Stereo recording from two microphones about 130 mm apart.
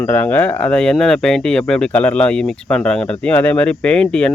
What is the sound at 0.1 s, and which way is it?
Speech, 15° left (ahead or behind).